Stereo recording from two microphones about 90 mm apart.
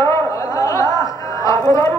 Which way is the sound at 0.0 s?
35° left (ahead or behind).